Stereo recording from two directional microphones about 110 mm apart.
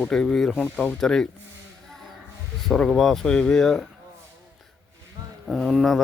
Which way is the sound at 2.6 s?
5° left (ahead or behind).